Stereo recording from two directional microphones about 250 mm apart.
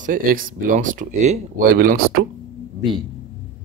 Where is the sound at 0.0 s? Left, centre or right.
Right.